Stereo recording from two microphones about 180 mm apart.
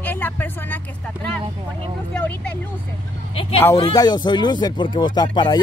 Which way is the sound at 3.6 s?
20° left (ahead or behind).